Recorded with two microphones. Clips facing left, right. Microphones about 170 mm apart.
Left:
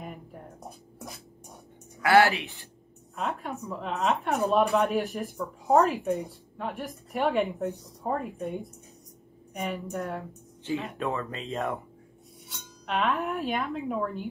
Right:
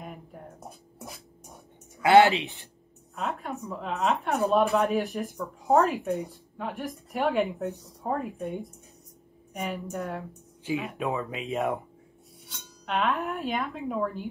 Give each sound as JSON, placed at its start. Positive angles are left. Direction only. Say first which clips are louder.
{"t": 0.0, "sound": "a sound", "louder": "left 1 dB", "side_deg": 0}
{"t": 2.0, "sound": "speech", "louder": "right 3 dB", "side_deg": -20}
{"t": 3.2, "sound": "a woman's voice", "louder": "even", "side_deg": 0}
{"t": 12.8, "sound": "a woman's voice", "louder": "even", "side_deg": 0}